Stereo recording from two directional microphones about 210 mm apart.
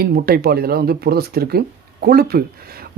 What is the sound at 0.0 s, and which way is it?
Speech, 45° right (ahead or behind).